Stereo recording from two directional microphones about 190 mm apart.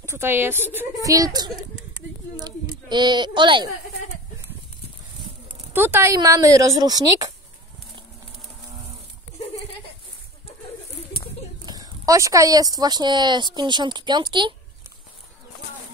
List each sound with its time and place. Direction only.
0.0 s a woman's voice: 15° right (ahead or behind)
5.7 s a woman's voice: 10° right (ahead or behind)
11.6 s speech: 20° right (ahead or behind)